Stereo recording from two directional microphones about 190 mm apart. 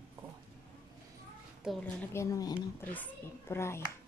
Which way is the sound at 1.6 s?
Centre (ahead or behind).